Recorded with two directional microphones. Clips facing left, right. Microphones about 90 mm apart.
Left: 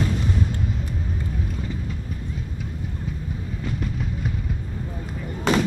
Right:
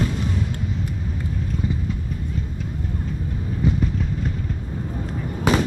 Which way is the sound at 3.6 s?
15° right (ahead or behind).